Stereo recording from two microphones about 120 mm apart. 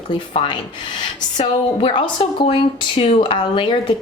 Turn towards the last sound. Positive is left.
turn(degrees=45)  # may be behind; listen again after turning